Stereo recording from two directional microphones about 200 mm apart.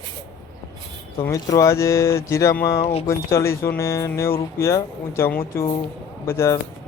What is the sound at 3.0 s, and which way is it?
Speech, 15° left (ahead or behind).